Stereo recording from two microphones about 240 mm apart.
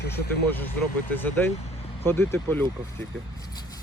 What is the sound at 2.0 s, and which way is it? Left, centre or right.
Speech, centre.